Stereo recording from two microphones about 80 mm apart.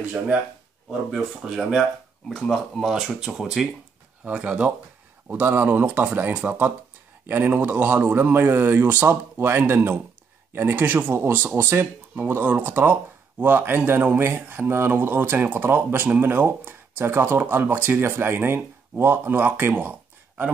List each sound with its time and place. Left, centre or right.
0.8 s speech: centre